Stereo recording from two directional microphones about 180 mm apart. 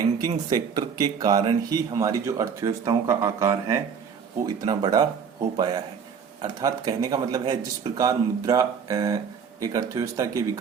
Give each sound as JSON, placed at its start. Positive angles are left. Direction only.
{"t": 0.0, "sound": "speech", "side_deg": -20}